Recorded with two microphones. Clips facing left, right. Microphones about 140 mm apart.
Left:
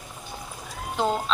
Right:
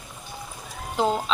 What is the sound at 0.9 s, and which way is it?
Speech, 5° right (ahead or behind).